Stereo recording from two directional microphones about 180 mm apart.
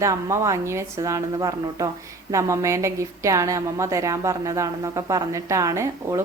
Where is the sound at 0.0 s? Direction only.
15° right (ahead or behind).